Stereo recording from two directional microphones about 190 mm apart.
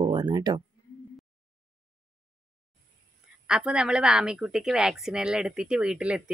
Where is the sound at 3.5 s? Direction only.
5° right (ahead or behind).